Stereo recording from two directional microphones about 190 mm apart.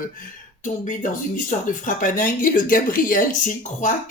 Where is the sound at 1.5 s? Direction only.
45° left (ahead or behind).